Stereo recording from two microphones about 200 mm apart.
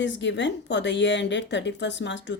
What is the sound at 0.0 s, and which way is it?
A woman's voice, 65° left (ahead or behind).